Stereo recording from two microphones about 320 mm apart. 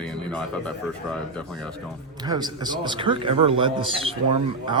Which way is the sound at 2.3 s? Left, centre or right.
Centre.